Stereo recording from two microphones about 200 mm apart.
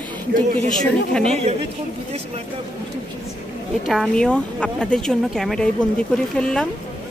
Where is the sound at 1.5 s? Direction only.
35° right (ahead or behind).